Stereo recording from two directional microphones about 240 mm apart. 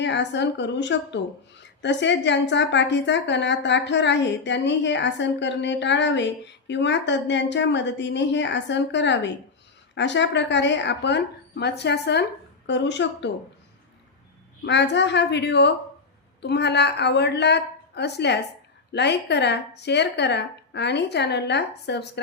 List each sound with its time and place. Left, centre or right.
0.0 s a woman's voice: left
14.6 s a woman's voice: left